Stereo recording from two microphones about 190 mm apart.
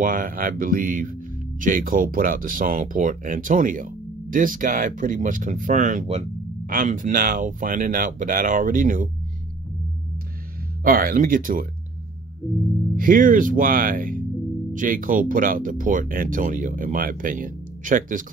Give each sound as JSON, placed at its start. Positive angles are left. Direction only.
{"t": 0.0, "sound": "speech", "side_deg": -45}
{"t": 10.8, "sound": "speech", "side_deg": -50}
{"t": 12.9, "sound": "speech", "side_deg": -50}